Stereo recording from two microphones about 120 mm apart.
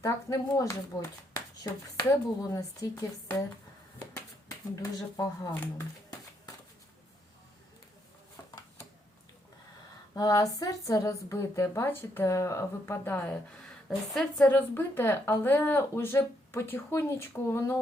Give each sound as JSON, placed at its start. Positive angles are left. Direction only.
{"t": 0.0, "sound": "speech", "side_deg": 25}
{"t": 4.4, "sound": "speech", "side_deg": 30}
{"t": 10.2, "sound": "speech", "side_deg": 30}
{"t": 14.1, "sound": "a woman's voice", "side_deg": 5}
{"t": 14.5, "sound": "speech", "side_deg": 20}